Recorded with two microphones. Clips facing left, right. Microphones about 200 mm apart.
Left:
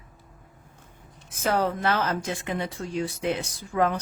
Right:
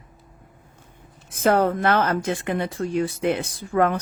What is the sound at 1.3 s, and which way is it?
Speech, 55° right (ahead or behind).